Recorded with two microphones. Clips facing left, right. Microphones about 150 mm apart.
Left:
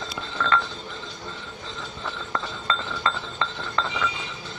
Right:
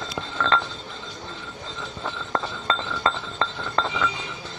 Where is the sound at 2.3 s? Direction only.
35° right (ahead or behind).